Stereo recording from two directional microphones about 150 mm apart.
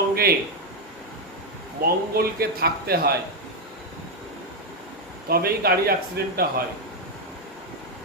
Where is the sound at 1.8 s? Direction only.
90° right.